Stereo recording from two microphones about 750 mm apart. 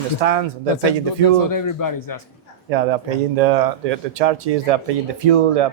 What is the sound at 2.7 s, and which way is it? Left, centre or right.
Speech, right.